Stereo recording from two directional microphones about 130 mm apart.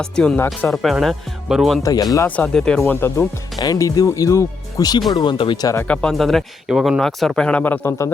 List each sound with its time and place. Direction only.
0.0 s speech: 5° left (ahead or behind)
0.3 s speech: 15° left (ahead or behind)
0.7 s speech: centre (ahead or behind)
1.8 s speech: 30° left (ahead or behind)
2.1 s speech: 15° left (ahead or behind)
3.6 s speech: 30° left (ahead or behind)
5.9 s speech: 5° left (ahead or behind)